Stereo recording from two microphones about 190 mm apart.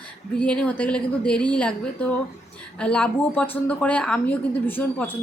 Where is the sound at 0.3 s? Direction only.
5° left (ahead or behind).